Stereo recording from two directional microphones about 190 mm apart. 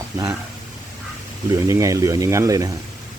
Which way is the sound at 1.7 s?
15° right (ahead or behind).